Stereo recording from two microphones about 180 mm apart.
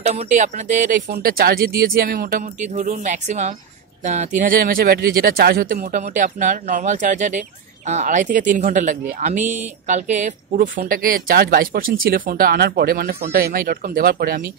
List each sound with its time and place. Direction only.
0.0 s a woman's voice: 40° right (ahead or behind)